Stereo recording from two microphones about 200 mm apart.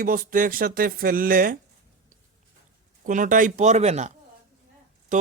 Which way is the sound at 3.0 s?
40° right (ahead or behind).